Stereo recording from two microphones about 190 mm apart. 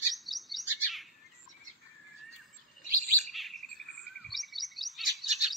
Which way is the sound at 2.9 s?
50° right (ahead or behind).